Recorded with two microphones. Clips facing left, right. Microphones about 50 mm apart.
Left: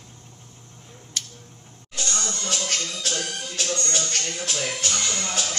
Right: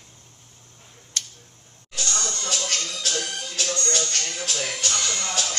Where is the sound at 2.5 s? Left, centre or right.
Centre.